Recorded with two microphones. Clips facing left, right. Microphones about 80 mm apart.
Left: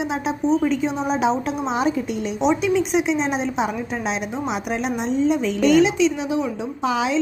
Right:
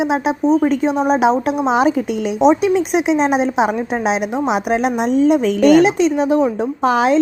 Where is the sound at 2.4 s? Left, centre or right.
Right.